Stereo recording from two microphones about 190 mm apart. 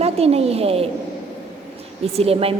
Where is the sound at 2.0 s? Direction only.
30° right (ahead or behind).